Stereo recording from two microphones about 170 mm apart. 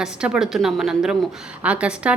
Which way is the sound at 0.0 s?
5° right (ahead or behind).